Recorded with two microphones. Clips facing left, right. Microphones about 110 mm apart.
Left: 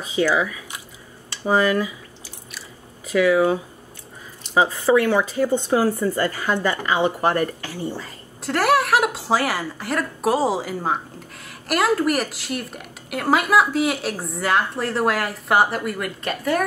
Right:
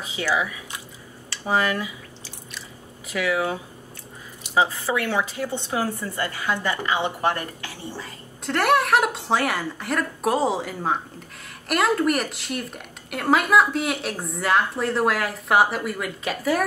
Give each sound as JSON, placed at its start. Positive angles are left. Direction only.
{"t": 0.1, "sound": "speech", "side_deg": 40}
{"t": 1.5, "sound": "speech", "side_deg": 35}
{"t": 3.1, "sound": "speech", "side_deg": 40}
{"t": 4.6, "sound": "speech", "side_deg": 40}
{"t": 8.5, "sound": "a woman's voice", "side_deg": 0}